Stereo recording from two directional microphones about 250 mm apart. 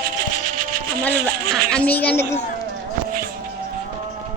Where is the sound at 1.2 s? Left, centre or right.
Centre.